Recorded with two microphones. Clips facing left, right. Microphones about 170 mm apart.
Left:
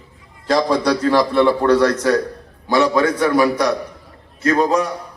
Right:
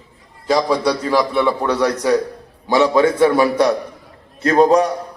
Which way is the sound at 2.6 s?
20° right (ahead or behind).